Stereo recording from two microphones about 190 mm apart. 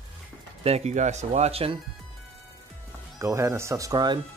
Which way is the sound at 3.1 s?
15° right (ahead or behind).